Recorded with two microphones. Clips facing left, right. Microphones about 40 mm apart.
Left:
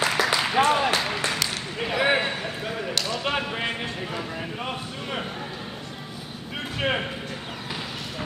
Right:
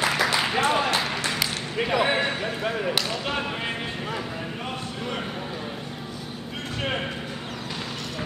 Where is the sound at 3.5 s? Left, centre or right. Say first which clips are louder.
Left 1 dB; centre.